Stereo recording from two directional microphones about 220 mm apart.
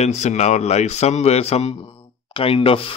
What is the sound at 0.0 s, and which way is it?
Speech, 30° left (ahead or behind).